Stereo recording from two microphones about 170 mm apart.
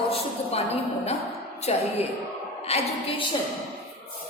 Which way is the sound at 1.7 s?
40° left (ahead or behind).